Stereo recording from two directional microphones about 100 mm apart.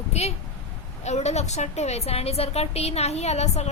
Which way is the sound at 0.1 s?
90° left.